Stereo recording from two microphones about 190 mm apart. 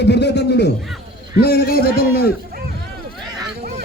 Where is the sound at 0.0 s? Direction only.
60° left (ahead or behind).